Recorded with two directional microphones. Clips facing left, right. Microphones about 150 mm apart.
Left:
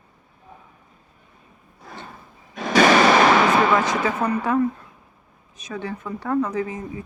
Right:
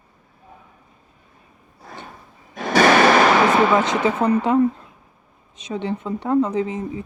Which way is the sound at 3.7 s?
25° right (ahead or behind).